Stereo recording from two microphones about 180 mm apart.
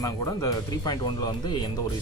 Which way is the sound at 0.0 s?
20° left (ahead or behind).